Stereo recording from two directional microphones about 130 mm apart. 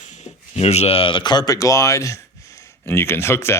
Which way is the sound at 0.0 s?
65° left (ahead or behind).